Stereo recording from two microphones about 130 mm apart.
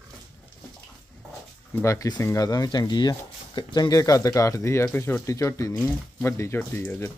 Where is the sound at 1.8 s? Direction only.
25° left (ahead or behind).